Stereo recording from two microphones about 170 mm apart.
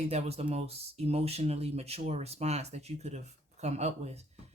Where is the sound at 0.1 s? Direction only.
40° right (ahead or behind).